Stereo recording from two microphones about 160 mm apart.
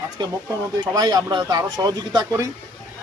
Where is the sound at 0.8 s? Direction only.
25° right (ahead or behind).